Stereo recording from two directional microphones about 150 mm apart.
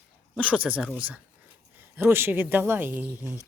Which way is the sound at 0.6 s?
10° right (ahead or behind).